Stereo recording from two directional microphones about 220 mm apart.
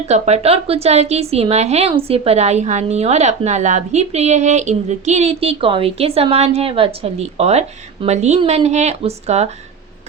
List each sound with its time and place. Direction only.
0.1 s a woman's voice: 30° right (ahead or behind)